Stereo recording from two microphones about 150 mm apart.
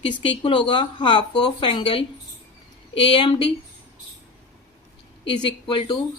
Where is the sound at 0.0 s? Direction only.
35° left (ahead or behind).